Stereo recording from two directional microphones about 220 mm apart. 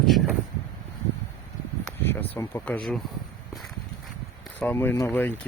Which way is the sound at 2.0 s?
10° left (ahead or behind).